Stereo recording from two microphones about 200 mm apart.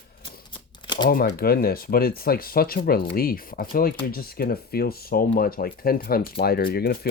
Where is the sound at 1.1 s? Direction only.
50° left (ahead or behind).